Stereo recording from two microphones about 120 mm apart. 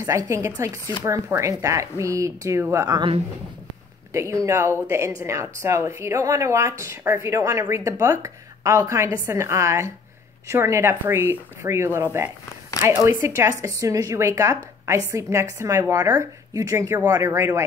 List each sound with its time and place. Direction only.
0.0 s speech: 25° right (ahead or behind)
4.1 s speech: 25° right (ahead or behind)